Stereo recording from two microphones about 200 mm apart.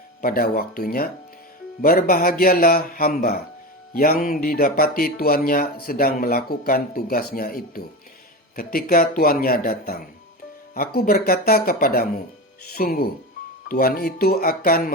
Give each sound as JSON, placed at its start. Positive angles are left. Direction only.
{"t": 0.2, "sound": "speech", "side_deg": 45}